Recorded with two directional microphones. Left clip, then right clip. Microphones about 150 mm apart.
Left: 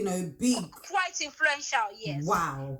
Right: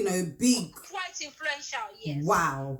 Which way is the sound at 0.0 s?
5° right (ahead or behind).